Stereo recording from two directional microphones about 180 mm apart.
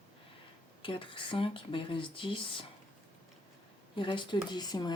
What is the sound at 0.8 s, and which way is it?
Speech, 30° left (ahead or behind).